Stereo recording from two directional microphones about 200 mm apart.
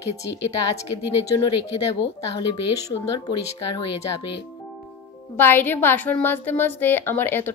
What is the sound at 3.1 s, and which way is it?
Speech, 20° left (ahead or behind).